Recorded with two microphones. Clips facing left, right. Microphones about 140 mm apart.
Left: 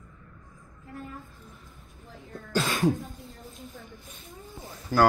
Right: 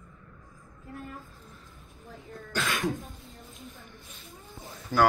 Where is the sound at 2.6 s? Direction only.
30° left (ahead or behind).